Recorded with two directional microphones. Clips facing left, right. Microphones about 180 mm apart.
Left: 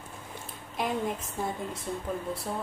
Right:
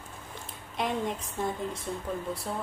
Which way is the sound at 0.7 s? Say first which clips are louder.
Even; centre (ahead or behind).